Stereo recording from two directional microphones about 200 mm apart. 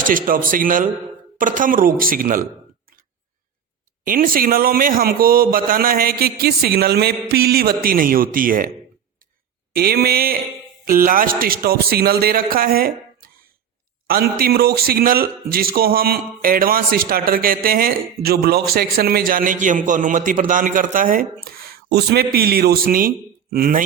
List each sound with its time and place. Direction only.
0.0 s a man's voice: 45° right (ahead or behind)
4.0 s a man's voice: 45° right (ahead or behind)
9.7 s a man's voice: 50° right (ahead or behind)
14.1 s a man's voice: 50° right (ahead or behind)